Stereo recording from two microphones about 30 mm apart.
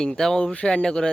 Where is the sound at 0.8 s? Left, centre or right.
Left.